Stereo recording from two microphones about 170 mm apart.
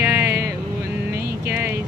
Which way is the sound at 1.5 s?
10° right (ahead or behind).